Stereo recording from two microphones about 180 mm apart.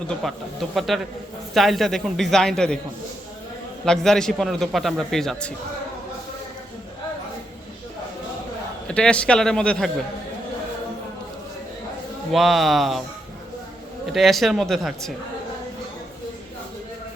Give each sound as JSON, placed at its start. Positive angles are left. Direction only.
{"t": 0.1, "sound": "a man's voice", "side_deg": 0}
{"t": 3.8, "sound": "a man's voice", "side_deg": 5}
{"t": 8.9, "sound": "a man's voice", "side_deg": 5}
{"t": 12.3, "sound": "a man's voice", "side_deg": 0}
{"t": 14.1, "sound": "a man's voice", "side_deg": 0}